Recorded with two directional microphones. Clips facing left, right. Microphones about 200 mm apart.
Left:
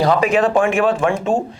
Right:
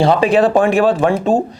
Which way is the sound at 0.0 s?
30° right (ahead or behind).